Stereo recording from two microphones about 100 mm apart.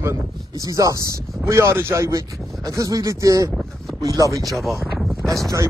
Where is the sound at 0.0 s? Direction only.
30° right (ahead or behind).